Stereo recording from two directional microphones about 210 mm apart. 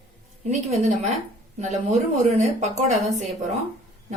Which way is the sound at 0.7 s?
30° right (ahead or behind).